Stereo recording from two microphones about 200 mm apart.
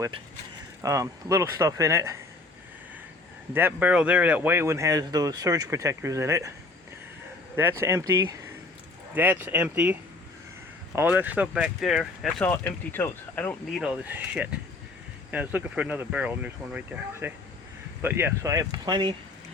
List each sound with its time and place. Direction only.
0.8 s speech: 15° right (ahead or behind)
3.5 s speech: 10° right (ahead or behind)
7.5 s speech: 10° right (ahead or behind)